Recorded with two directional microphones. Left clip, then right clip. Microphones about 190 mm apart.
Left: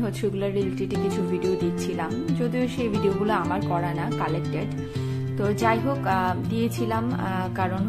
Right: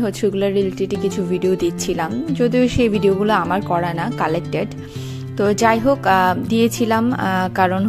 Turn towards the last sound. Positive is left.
turn(degrees=-45)  # may be behind; listen again after turning